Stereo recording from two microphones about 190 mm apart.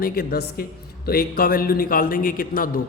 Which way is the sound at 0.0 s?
55° left (ahead or behind).